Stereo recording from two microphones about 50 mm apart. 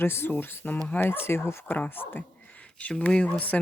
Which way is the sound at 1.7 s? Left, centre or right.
Left.